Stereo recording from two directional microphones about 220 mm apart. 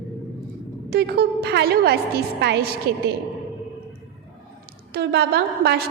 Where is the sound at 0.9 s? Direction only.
45° right (ahead or behind).